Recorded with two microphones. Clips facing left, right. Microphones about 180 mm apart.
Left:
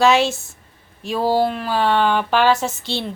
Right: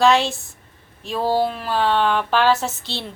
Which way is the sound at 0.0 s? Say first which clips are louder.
Left 1 dB; centre (ahead or behind).